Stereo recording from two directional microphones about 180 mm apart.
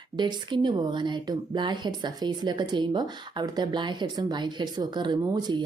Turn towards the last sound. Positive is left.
turn(degrees=-25)  # may be behind; listen again after turning